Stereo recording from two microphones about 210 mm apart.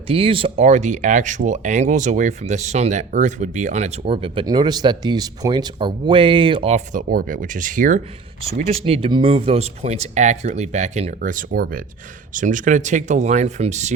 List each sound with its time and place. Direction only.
0.1 s speech: 25° right (ahead or behind)
7.0 s speech: 45° right (ahead or behind)